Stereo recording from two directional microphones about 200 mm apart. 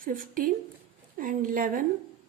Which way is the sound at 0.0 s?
45° right (ahead or behind).